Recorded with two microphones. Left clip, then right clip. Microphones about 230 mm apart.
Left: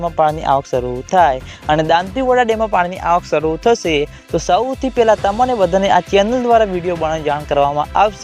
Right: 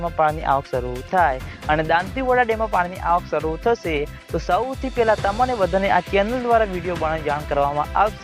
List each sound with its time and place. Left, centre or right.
0.0 s speech: left